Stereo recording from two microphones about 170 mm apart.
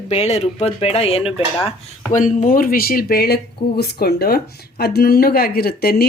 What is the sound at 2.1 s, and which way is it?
Speech, 50° left (ahead or behind).